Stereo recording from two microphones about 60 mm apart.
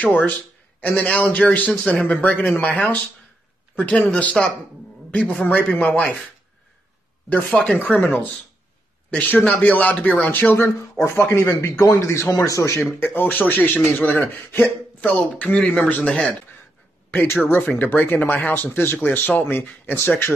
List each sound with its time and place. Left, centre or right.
0.0 s speech: left
5.4 s speech: left
7.2 s speech: left
11.0 s speech: left
12.4 s speech: left
13.0 s speech: left
17.1 s speech: left